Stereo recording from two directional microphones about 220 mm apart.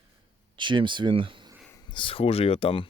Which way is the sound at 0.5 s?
20° right (ahead or behind).